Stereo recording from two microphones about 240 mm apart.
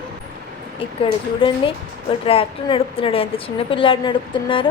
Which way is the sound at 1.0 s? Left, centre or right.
Left.